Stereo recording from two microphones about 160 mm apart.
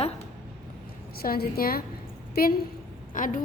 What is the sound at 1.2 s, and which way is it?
A woman's voice, 70° left (ahead or behind).